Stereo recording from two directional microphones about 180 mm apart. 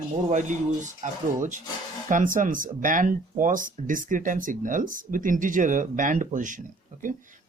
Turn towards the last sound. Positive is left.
turn(degrees=-45)  # may be behind; listen again after turning